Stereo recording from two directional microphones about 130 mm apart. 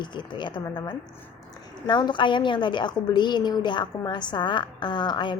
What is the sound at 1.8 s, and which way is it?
A woman's voice, 35° left (ahead or behind).